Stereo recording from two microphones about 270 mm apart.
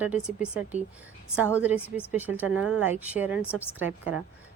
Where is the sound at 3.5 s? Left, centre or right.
Centre.